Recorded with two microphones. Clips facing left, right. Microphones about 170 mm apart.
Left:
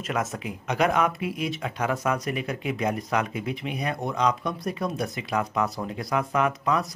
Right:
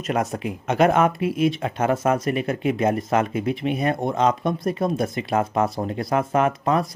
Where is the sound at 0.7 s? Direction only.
50° right (ahead or behind).